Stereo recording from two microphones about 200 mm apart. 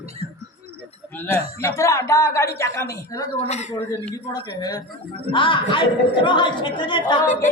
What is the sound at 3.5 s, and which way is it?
Speech, 35° left (ahead or behind).